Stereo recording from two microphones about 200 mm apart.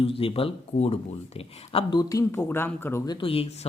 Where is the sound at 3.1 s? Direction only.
30° left (ahead or behind).